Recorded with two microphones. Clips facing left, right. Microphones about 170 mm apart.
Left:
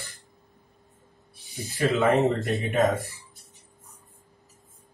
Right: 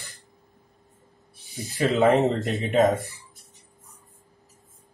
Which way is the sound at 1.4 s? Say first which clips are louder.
Right 1 dB; centre (ahead or behind).